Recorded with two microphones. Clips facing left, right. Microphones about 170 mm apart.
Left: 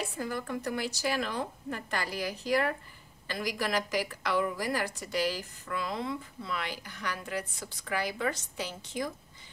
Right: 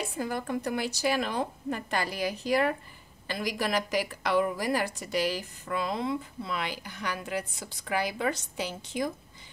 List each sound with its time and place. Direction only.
0.2 s a woman's voice: 20° right (ahead or behind)